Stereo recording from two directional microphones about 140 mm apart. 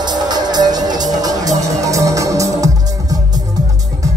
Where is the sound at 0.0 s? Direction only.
30° right (ahead or behind).